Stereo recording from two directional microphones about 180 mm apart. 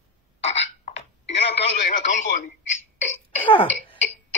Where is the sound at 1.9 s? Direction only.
40° left (ahead or behind).